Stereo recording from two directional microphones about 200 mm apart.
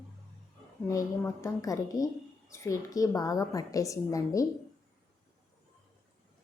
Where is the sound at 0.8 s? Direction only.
15° left (ahead or behind).